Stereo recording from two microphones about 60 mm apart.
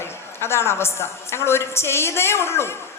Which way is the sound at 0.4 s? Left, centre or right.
Left.